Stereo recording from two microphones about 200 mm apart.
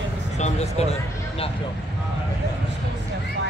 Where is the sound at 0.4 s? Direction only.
35° left (ahead or behind).